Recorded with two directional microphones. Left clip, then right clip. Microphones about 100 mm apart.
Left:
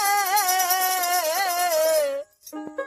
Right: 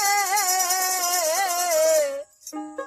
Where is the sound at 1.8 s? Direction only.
25° right (ahead or behind).